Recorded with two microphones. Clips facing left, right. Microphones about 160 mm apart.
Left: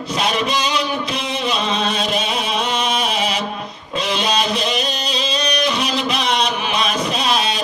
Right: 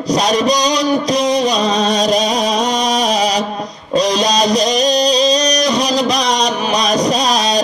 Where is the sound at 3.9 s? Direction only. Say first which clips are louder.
Right 6 dB; 40° right (ahead or behind).